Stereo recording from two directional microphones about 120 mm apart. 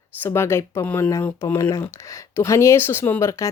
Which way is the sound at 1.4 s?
25° left (ahead or behind).